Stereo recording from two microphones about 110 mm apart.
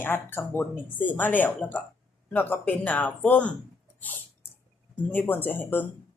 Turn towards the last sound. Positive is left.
turn(degrees=15)  # may be behind; listen again after turning